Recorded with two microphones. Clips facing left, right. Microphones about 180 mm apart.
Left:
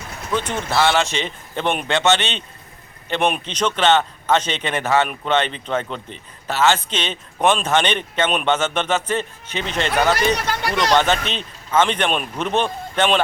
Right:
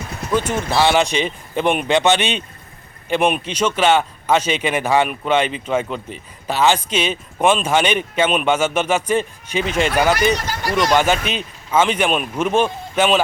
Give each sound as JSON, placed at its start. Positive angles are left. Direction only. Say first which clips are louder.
{"t": 0.3, "sound": "speech", "louder": "right 3 dB", "side_deg": -5}